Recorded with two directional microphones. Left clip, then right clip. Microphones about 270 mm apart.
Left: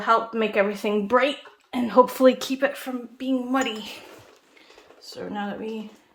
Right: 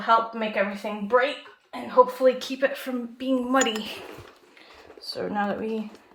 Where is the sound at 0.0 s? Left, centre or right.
Left.